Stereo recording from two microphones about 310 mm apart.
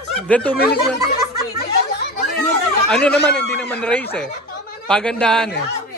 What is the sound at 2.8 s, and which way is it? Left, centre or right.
A man's voice, centre.